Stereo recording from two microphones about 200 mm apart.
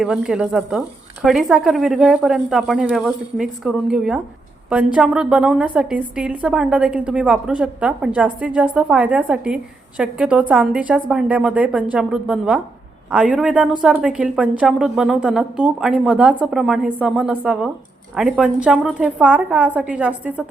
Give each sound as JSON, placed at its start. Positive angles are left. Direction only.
{"t": 0.0, "sound": "a woman's voice", "side_deg": -5}